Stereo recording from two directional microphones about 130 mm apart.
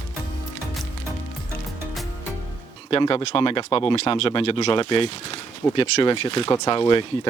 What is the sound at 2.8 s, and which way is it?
Speech, 45° left (ahead or behind).